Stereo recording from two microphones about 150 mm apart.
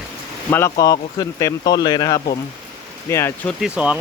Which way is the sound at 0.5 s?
20° left (ahead or behind).